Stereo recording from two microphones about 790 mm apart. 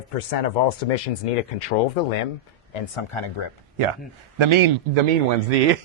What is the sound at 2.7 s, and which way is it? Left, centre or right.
Speech, left.